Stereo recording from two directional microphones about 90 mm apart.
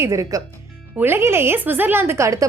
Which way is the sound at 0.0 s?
35° right (ahead or behind).